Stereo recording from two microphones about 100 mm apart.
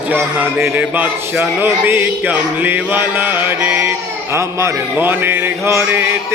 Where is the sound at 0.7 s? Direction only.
15° right (ahead or behind).